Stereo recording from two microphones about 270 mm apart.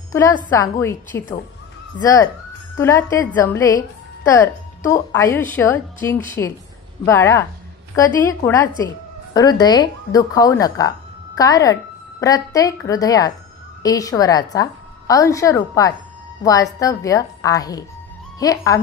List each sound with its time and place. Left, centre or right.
0.1 s a woman's voice: centre
2.8 s a woman's voice: centre